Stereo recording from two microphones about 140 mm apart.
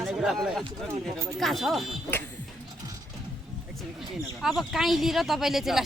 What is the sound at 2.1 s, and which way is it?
Speech, 15° left (ahead or behind).